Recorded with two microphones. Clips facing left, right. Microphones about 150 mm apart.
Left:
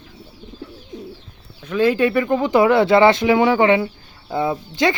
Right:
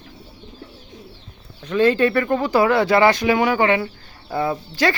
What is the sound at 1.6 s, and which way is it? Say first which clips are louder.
Speech: even; 5° left (ahead or behind).